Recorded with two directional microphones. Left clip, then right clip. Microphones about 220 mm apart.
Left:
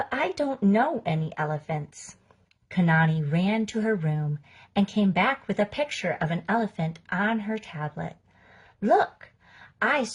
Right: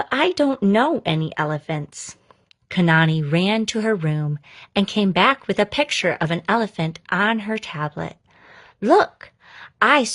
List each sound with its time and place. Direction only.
0.1 s a woman's voice: 40° right (ahead or behind)